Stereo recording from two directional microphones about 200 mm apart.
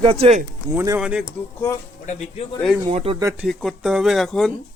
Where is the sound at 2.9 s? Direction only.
30° right (ahead or behind).